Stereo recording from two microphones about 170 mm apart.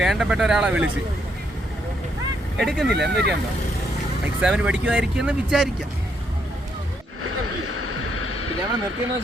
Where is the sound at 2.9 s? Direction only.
85° right.